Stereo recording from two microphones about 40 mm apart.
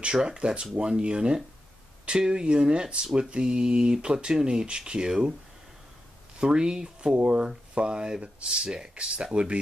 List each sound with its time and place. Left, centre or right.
0.0 s speech: centre
6.4 s speech: centre